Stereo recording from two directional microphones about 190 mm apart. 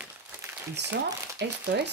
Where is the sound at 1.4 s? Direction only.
60° right (ahead or behind).